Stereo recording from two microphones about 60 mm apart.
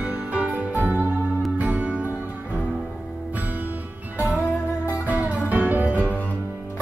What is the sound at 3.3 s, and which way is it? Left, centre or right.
Music, right.